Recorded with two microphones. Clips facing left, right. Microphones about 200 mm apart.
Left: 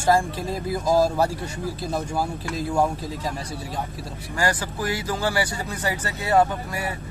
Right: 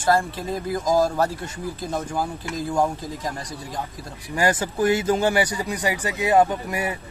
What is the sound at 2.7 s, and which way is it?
Speech, 10° left (ahead or behind).